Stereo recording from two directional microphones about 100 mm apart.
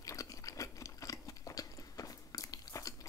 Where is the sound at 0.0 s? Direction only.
35° left (ahead or behind).